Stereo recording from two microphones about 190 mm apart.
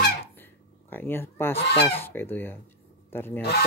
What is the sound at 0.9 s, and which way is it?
Speech, 10° left (ahead or behind).